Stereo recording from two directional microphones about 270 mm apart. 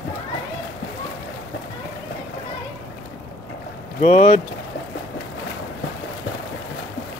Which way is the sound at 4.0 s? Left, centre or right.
Left.